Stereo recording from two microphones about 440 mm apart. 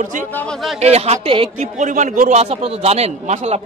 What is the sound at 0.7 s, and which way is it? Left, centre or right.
Speech, centre.